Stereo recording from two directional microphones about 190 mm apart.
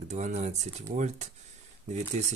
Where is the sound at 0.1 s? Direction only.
40° right (ahead or behind).